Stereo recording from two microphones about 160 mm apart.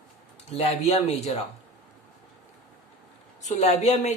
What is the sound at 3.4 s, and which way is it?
Speech, 45° left (ahead or behind).